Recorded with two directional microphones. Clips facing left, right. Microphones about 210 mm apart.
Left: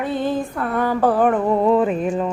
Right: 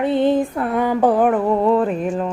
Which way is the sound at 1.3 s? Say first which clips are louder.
Even; centre (ahead or behind).